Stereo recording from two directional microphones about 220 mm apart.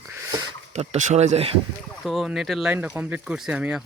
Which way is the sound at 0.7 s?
35° right (ahead or behind).